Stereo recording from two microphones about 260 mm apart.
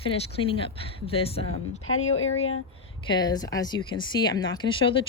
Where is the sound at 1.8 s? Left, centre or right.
Left.